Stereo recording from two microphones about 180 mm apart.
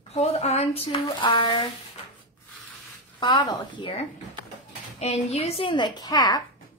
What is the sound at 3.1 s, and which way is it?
A woman's voice, 25° left (ahead or behind).